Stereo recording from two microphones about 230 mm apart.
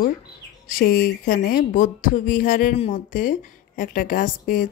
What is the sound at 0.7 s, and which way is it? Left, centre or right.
Speech, left.